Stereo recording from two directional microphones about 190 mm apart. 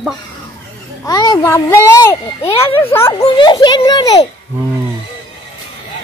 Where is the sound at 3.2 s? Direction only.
25° left (ahead or behind).